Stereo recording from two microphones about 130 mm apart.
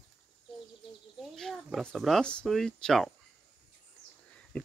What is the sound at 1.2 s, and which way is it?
Speech, centre (ahead or behind).